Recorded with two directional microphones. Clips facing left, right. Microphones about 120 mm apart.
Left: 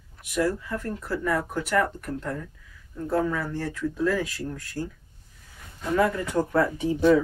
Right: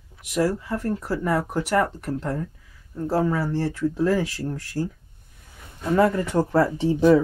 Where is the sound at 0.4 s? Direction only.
35° right (ahead or behind).